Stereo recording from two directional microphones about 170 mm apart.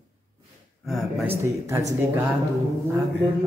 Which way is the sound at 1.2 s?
15° right (ahead or behind).